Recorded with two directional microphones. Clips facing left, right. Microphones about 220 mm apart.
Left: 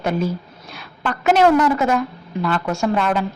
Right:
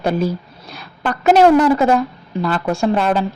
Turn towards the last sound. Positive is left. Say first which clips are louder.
# right 3 dB
turn(degrees=-35)  # may be behind; listen again after turning